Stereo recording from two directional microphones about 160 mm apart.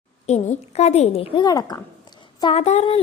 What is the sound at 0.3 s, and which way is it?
A woman's voice, 45° left (ahead or behind).